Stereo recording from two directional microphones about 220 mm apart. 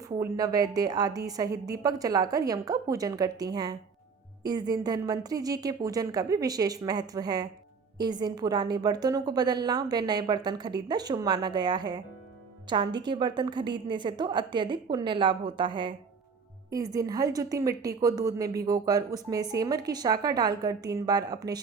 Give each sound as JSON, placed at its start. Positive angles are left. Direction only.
{"t": 0.2, "sound": "a woman's voice", "side_deg": -15}